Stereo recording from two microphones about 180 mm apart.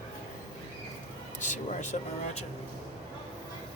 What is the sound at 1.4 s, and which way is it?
Vehicle, 45° left (ahead or behind).